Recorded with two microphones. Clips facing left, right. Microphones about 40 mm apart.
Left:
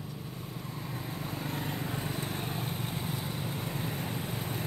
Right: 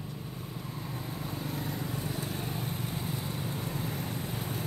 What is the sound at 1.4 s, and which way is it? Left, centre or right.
Vehicle, left.